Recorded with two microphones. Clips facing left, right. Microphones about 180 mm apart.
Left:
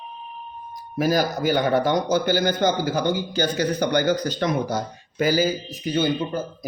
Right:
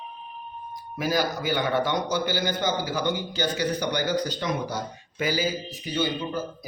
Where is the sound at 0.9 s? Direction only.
40° left (ahead or behind).